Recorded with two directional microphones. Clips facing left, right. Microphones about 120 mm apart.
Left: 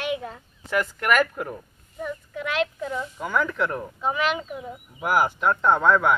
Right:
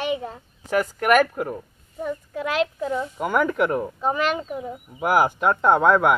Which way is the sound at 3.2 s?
50° right (ahead or behind).